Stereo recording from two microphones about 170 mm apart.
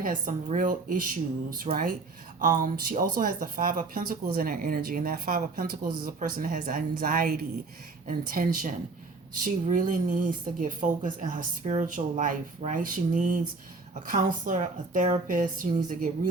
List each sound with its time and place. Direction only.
0.0 s a woman's voice: 50° right (ahead or behind)